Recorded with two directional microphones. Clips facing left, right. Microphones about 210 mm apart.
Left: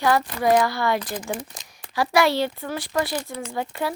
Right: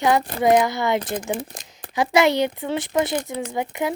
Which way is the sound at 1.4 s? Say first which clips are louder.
Right 4 dB; 55° right (ahead or behind).